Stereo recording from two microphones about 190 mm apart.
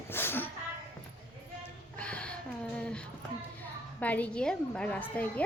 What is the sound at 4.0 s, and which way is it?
A woman's voice, 10° left (ahead or behind).